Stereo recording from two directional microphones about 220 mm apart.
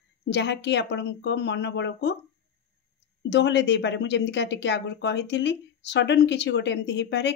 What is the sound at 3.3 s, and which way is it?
Speech, 50° left (ahead or behind).